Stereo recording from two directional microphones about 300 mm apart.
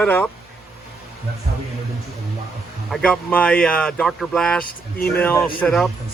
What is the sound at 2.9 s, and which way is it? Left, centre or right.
Speech, centre.